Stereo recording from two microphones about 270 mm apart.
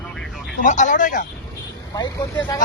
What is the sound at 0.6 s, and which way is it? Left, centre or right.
Speech, left.